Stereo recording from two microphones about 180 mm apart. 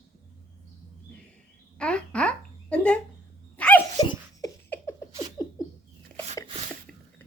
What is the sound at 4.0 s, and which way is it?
Dog, 25° left (ahead or behind).